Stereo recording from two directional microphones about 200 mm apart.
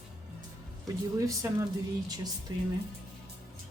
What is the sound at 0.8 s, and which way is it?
Speech, 15° right (ahead or behind).